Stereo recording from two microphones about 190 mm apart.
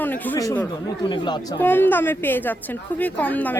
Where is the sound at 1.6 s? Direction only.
10° left (ahead or behind).